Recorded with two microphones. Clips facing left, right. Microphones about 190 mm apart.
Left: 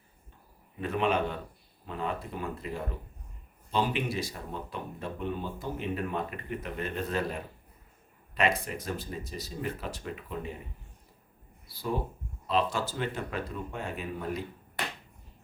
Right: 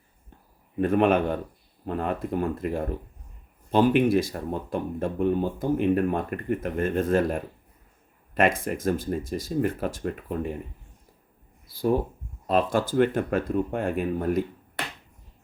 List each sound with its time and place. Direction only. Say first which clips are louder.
0.8 s speech: right 8 dB; 50° right (ahead or behind)
8.6 s speech: right 10 dB; 50° right (ahead or behind)
12.5 s speech: right 6 dB; 50° right (ahead or behind)